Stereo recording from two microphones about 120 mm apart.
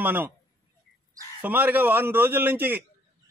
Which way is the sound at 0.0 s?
15° right (ahead or behind).